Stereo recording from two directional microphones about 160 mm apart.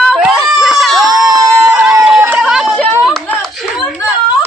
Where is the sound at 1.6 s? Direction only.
10° right (ahead or behind).